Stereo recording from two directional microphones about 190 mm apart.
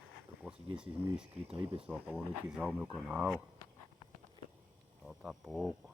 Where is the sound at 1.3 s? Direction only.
30° right (ahead or behind).